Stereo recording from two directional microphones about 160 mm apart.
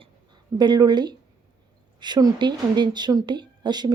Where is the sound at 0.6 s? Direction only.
25° right (ahead or behind).